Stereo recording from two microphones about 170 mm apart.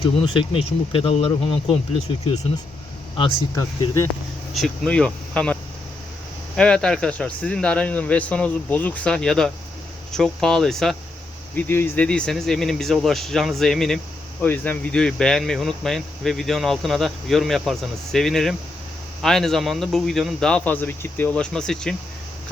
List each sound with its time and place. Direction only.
0.0 s speech: 30° left (ahead or behind)
3.5 s speech: 15° left (ahead or behind)
4.5 s speech: centre (ahead or behind)
6.6 s speech: 5° left (ahead or behind)